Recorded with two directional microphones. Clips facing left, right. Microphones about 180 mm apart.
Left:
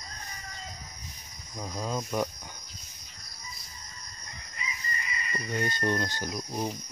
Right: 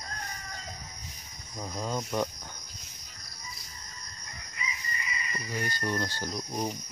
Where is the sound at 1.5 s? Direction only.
Centre (ahead or behind).